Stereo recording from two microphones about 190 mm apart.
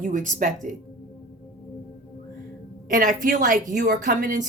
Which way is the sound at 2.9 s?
45° right (ahead or behind).